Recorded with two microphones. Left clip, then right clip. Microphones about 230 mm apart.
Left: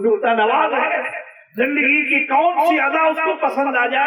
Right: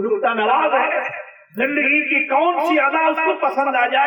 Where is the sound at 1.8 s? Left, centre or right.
Left.